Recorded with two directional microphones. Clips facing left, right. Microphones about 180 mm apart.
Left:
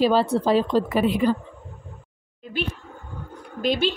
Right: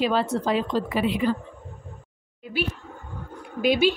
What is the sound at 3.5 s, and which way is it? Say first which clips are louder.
Speech: right 2 dB; 10° right (ahead or behind).